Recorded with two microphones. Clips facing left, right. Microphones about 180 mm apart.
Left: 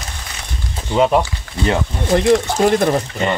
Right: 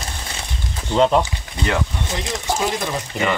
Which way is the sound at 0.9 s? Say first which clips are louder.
Left 1 dB; 10° left (ahead or behind).